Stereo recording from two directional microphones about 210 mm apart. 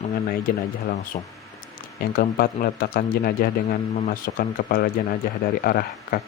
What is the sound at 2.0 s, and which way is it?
Speech, 45° left (ahead or behind).